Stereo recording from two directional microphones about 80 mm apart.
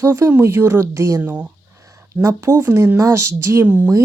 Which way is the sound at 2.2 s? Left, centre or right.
Right.